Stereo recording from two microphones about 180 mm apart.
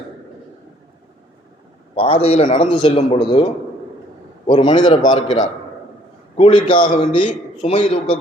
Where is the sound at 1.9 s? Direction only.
30° left (ahead or behind).